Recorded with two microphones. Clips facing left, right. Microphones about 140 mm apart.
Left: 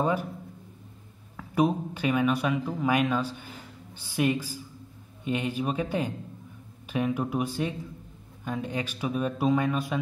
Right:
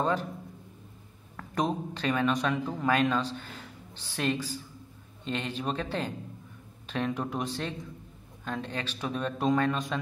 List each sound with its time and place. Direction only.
0.0 s a man's voice: 10° left (ahead or behind)
1.3 s speech: 10° left (ahead or behind)